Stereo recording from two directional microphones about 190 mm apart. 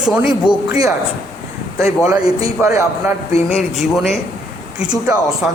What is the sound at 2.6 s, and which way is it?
Speech, 15° right (ahead or behind).